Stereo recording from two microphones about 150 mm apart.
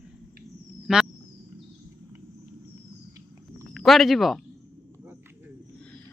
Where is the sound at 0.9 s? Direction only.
5° right (ahead or behind).